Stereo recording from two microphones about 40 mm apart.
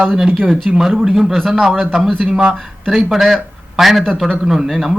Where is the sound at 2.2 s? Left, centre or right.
Right.